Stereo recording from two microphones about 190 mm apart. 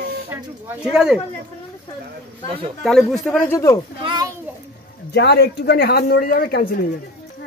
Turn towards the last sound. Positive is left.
turn(degrees=50)  # may be behind; listen again after turning